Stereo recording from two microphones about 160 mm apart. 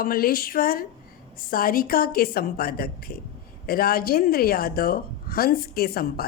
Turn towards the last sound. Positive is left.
turn(degrees=70)  # may be behind; listen again after turning